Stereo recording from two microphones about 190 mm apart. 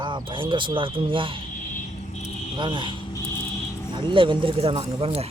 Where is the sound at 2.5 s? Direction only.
25° right (ahead or behind).